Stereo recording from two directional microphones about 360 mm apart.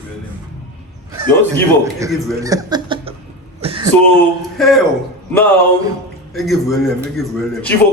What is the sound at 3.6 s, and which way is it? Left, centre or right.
Throat clearing, centre.